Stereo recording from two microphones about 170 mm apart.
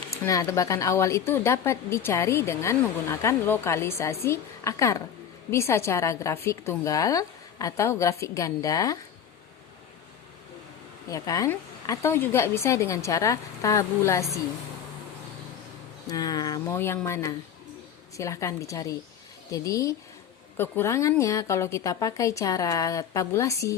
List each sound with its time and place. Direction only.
0.3 s a woman's voice: 20° left (ahead or behind)
11.1 s a woman's voice: 20° left (ahead or behind)
16.0 s a woman's voice: 20° left (ahead or behind)